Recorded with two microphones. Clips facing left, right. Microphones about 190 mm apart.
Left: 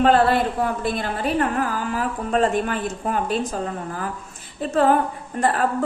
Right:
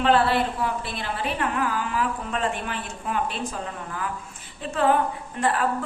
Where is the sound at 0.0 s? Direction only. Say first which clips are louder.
Left 4 dB; 45° left (ahead or behind).